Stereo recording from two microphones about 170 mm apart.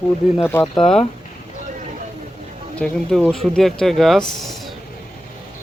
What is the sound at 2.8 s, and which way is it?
Speech, 5° left (ahead or behind).